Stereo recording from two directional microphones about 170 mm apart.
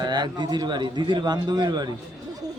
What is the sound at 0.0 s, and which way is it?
A man's voice, 25° right (ahead or behind).